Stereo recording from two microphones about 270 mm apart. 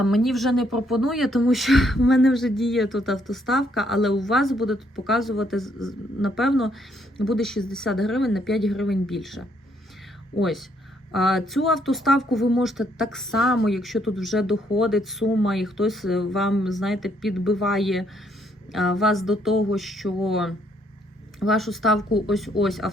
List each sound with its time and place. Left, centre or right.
0.0 s speech: centre
10.3 s speech: centre
11.1 s speech: centre